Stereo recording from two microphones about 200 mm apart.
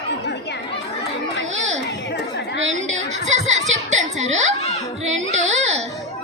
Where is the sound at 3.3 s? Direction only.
35° right (ahead or behind).